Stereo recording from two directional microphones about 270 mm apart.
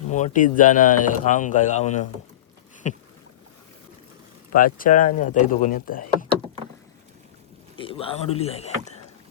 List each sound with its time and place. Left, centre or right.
0.1 s speech: left
2.8 s boat: left
4.5 s speech: left
7.8 s speech: centre